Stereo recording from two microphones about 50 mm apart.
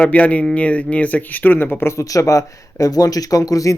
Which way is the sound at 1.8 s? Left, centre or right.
Left.